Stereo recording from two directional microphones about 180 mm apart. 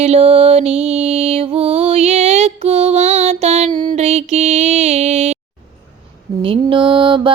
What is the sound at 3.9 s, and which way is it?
Mantra, 35° right (ahead or behind).